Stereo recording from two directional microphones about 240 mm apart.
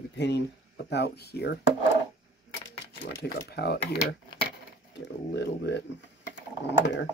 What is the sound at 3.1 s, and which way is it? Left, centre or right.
Speech, left.